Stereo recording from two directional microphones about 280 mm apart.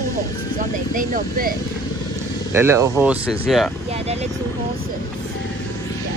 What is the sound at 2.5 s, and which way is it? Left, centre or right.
Speech, centre.